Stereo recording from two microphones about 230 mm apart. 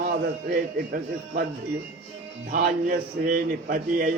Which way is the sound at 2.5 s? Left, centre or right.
Right.